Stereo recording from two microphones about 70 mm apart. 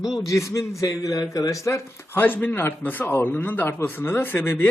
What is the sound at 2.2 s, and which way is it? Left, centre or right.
Speech, left.